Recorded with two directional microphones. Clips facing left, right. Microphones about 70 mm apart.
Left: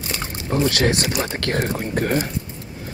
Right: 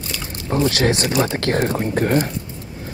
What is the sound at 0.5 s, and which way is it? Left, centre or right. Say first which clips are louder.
Speech: right 1 dB; right.